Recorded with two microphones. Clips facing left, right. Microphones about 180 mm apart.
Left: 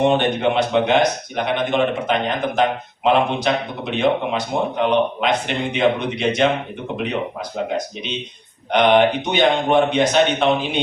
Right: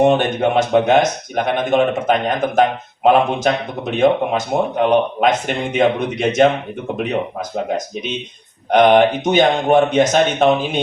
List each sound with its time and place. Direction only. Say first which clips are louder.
0.0 s speech: right 3 dB; 45° right (ahead or behind)
8.7 s speech: right 3 dB; 45° right (ahead or behind)